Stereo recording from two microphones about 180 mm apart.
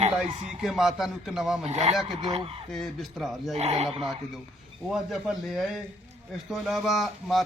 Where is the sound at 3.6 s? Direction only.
35° right (ahead or behind).